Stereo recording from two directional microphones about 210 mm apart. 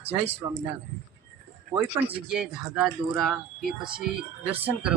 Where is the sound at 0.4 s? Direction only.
15° right (ahead or behind).